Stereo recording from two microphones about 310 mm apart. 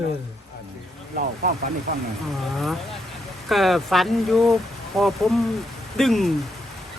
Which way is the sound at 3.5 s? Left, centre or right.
Centre.